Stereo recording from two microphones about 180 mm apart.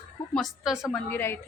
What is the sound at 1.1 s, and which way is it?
Speech, 10° left (ahead or behind).